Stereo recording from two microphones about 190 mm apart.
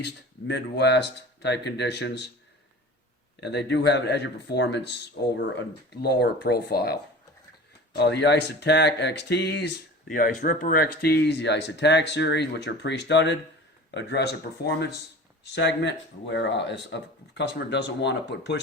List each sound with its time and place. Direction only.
0.0 s speech: 65° left (ahead or behind)
3.4 s speech: 65° left (ahead or behind)
10.1 s speech: 45° left (ahead or behind); by 18.6 s 65° left (ahead or behind)